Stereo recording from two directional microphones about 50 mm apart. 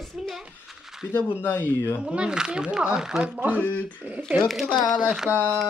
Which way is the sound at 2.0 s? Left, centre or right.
Centre.